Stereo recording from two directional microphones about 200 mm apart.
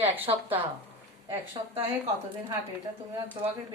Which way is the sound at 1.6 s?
25° right (ahead or behind).